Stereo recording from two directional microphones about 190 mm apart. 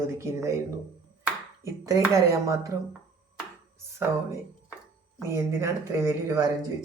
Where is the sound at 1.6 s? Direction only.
15° right (ahead or behind).